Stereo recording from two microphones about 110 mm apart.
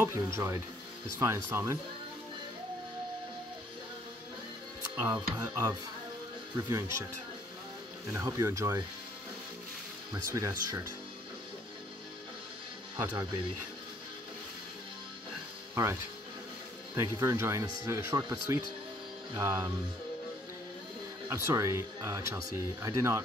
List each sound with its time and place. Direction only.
0.0 s speech: 25° right (ahead or behind)
4.9 s speech: 40° right (ahead or behind)
8.1 s speech: 30° right (ahead or behind)
10.1 s speech: 30° right (ahead or behind)
12.9 s speech: 35° right (ahead or behind)
15.7 s speech: 25° right (ahead or behind)
21.3 s speech: 25° right (ahead or behind)